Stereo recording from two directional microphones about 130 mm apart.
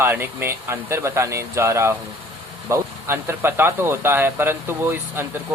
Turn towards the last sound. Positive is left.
turn(degrees=-15)  # may be behind; listen again after turning